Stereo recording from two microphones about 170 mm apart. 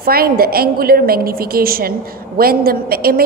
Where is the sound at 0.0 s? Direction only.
60° right (ahead or behind).